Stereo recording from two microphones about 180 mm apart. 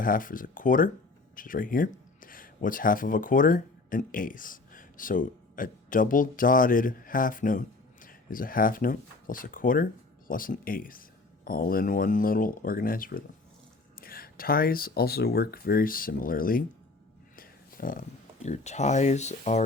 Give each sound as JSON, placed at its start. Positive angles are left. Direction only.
{"t": 0.0, "sound": "speech", "side_deg": 50}
{"t": 17.3, "sound": "a sound", "side_deg": 55}
{"t": 18.4, "sound": "speech", "side_deg": 40}